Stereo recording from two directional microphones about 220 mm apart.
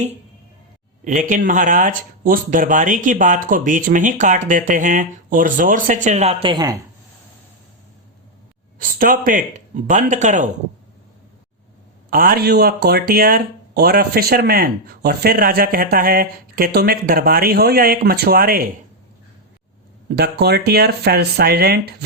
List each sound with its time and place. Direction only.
1.0 s speech: 35° right (ahead or behind); by 6.7 s 20° right (ahead or behind)
8.8 s speech: 40° right (ahead or behind)
12.1 s speech: 40° right (ahead or behind)
20.1 s speech: 45° right (ahead or behind)